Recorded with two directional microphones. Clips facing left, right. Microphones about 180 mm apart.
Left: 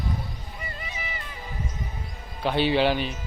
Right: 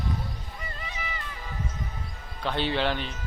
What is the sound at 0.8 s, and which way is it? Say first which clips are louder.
Music: right 1 dB; 15° left (ahead or behind).